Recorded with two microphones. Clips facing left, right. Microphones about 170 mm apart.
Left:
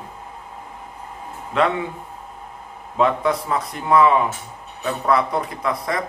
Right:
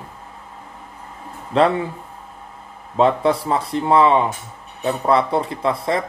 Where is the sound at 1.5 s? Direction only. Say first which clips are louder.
Right 4 dB; 35° right (ahead or behind).